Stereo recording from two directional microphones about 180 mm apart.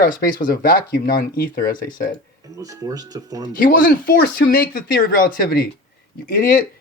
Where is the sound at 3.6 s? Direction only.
50° left (ahead or behind).